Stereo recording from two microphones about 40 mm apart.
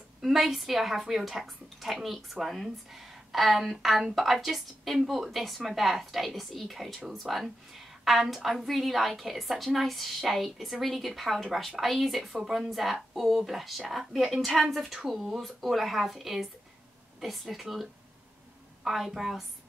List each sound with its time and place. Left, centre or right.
0.2 s speech: centre
15.0 s speech: centre
18.9 s speech: centre